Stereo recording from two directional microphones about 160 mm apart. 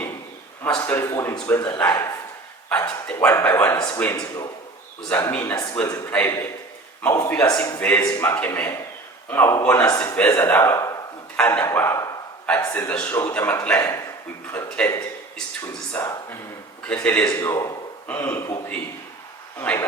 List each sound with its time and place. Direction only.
0.6 s speech: 10° left (ahead or behind)
2.6 s speech: 10° left (ahead or behind)
4.2 s speech: 25° left (ahead or behind)
5.0 s speech: 10° left (ahead or behind)
17.3 s speech: 20° left (ahead or behind)